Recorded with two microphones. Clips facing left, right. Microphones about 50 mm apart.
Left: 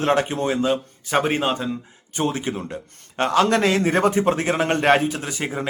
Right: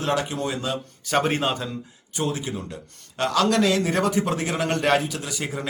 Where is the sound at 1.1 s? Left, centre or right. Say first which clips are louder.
Left 2 dB; centre.